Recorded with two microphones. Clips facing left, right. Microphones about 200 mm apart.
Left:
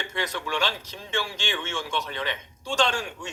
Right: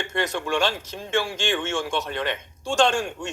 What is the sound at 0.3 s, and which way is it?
Speech, 50° right (ahead or behind).